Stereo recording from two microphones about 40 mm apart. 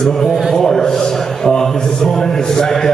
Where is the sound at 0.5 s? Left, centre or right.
Centre.